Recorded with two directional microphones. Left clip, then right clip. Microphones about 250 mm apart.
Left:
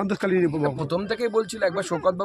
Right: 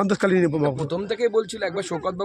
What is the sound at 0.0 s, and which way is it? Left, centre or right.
Speech, right.